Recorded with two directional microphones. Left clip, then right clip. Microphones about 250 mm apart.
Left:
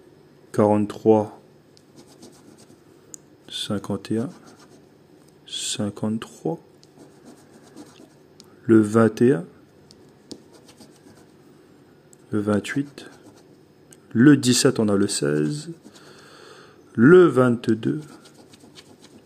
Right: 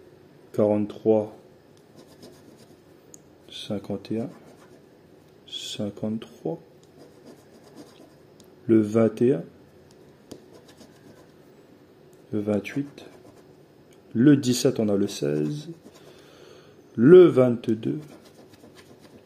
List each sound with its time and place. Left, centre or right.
0.5 s speech: centre
3.1 s a sound: centre
5.5 s speech: left
8.6 s a man's voice: centre
12.3 s speech: centre
14.1 s speech: centre